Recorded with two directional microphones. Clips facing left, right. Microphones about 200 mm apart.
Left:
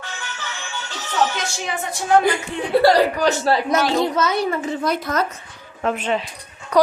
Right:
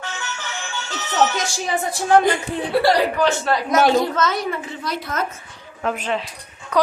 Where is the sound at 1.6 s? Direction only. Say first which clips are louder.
Right 3 dB; 35° right (ahead or behind).